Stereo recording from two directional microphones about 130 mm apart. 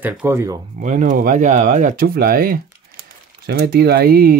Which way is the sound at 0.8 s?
70° right (ahead or behind).